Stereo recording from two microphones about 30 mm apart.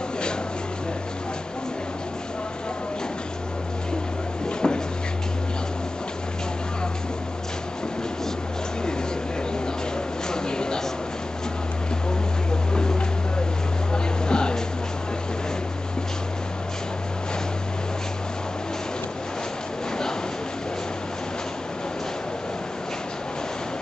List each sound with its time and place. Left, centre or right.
4.6 s cupboard open or close: left
10.3 s a sound: left
13.9 s vehicle: left